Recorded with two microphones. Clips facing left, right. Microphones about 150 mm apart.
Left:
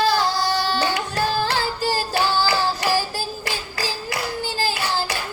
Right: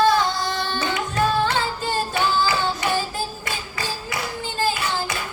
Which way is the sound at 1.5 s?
35° left (ahead or behind).